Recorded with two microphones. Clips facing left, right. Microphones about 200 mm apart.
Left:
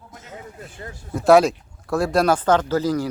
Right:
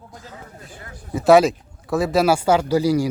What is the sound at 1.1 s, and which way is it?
Speech, centre (ahead or behind).